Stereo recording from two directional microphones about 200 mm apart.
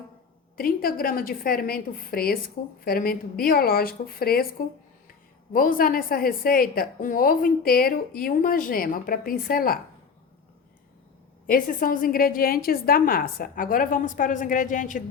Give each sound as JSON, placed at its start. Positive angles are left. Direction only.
{"t": 0.5, "sound": "a woman's voice", "side_deg": 45}
{"t": 5.5, "sound": "a woman's voice", "side_deg": 45}
{"t": 11.4, "sound": "a woman's voice", "side_deg": 45}